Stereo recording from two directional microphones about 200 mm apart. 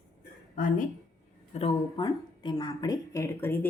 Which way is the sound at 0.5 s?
40° left (ahead or behind).